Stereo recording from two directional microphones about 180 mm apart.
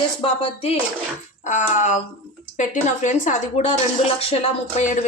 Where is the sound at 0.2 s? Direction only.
30° left (ahead or behind).